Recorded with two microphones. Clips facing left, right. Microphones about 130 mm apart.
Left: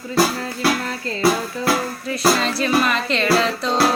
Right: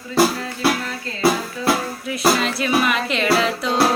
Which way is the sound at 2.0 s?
5° right (ahead or behind).